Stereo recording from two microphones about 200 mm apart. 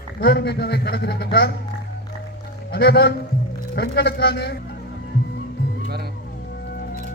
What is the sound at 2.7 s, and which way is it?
Speech, 55° left (ahead or behind).